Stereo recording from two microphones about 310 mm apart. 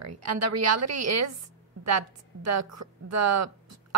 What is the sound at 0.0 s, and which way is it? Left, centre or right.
A woman's voice, right.